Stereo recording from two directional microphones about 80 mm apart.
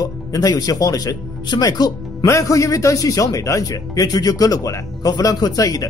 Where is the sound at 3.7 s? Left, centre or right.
Left.